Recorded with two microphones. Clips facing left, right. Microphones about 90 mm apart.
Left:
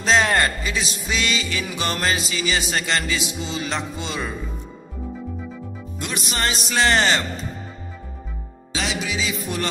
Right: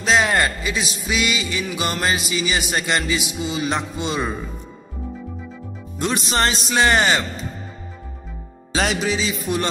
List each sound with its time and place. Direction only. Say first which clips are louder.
0.0 s music: even; 5° right (ahead or behind)
5.9 s speech: right 6 dB; 30° right (ahead or behind)
6.7 s music: right 1 dB; 20° right (ahead or behind)
8.7 s music: right 5 dB; 40° right (ahead or behind)